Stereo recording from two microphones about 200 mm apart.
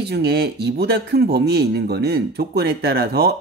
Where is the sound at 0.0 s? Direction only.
55° right (ahead or behind).